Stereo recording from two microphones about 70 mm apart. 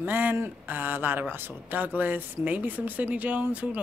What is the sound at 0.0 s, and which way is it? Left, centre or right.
Speech, right.